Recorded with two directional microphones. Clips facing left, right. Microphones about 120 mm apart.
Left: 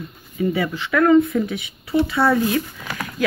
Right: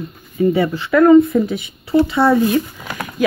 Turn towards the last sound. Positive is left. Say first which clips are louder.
# right 4 dB
turn(degrees=-20)  # may be behind; listen again after turning